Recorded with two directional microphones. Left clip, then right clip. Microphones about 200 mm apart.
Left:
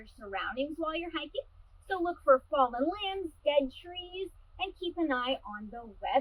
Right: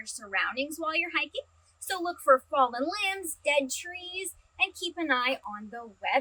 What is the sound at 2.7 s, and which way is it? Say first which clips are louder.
Speech: right 3 dB; 30° right (ahead or behind).